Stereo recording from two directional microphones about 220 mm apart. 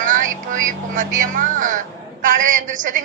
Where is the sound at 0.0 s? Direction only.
35° right (ahead or behind).